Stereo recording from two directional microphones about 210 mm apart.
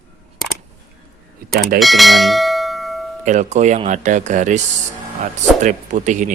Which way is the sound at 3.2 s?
35° right (ahead or behind).